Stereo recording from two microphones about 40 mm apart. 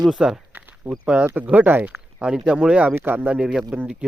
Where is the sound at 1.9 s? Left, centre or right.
Right.